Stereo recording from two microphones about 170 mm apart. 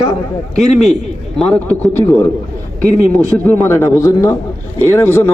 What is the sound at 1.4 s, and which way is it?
Speech, 10° left (ahead or behind).